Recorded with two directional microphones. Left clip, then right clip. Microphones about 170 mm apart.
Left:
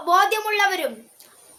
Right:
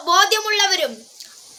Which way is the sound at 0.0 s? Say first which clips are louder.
Right 2 dB; 20° left (ahead or behind).